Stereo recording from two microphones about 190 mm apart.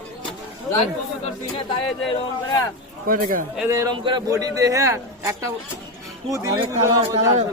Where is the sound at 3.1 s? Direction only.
45° right (ahead or behind).